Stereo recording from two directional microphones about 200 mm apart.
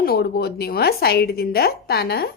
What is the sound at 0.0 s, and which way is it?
Speech, 50° left (ahead or behind).